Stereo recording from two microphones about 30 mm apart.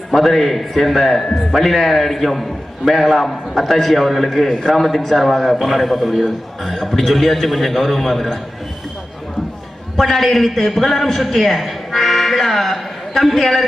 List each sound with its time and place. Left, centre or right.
0.1 s a man's voice: centre
4.4 s a man's voice: left
4.7 s a man's voice: centre
10.0 s a man's voice: centre